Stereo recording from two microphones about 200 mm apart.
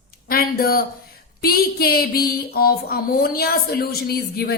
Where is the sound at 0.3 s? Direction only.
50° left (ahead or behind).